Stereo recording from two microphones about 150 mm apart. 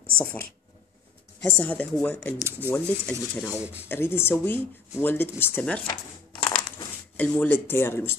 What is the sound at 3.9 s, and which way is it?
Speech, 15° left (ahead or behind).